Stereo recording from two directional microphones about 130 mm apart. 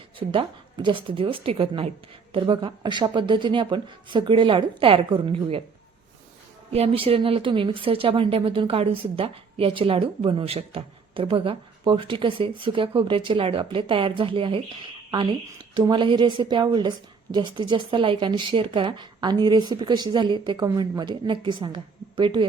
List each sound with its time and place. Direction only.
0.2 s a woman's voice: 40° right (ahead or behind)
6.7 s a woman's voice: 45° right (ahead or behind)